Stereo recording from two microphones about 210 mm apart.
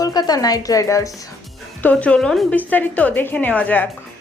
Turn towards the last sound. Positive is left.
turn(degrees=10)  # may be behind; listen again after turning